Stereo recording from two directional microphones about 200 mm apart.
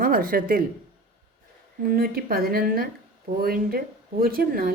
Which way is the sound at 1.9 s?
45° right (ahead or behind).